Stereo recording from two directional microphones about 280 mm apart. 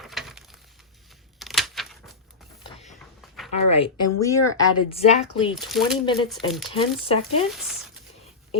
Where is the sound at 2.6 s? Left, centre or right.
Left.